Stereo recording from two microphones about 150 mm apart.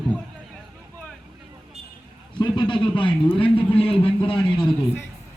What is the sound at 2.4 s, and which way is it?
Speech, 30° left (ahead or behind).